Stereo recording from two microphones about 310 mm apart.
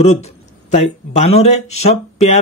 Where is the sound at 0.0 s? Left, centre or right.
Left.